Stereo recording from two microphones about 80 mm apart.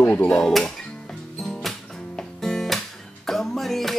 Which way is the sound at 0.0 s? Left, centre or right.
Left.